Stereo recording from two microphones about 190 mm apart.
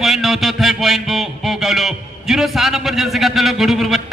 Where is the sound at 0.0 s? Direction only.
Centre (ahead or behind).